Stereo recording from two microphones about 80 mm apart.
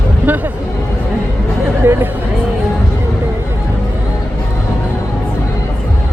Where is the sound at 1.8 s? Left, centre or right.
Right.